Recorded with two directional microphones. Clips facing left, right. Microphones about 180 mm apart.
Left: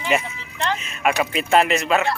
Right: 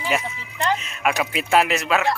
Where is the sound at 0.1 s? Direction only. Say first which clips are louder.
Left 3 dB; 10° right (ahead or behind).